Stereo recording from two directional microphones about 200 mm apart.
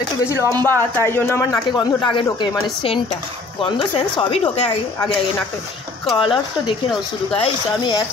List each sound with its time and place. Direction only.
0.3 s speech: 15° left (ahead or behind)
4.2 s speech: 30° left (ahead or behind)
6.1 s speech: 25° left (ahead or behind)